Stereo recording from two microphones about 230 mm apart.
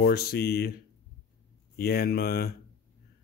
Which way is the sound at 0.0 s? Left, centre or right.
Left.